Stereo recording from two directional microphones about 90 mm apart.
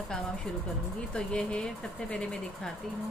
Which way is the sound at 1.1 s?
10° left (ahead or behind).